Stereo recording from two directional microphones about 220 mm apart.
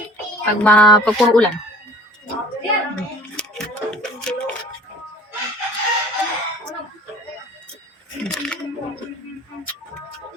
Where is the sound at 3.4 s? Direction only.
5° left (ahead or behind).